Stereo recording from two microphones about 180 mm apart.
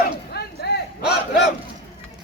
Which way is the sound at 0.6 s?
70° left (ahead or behind).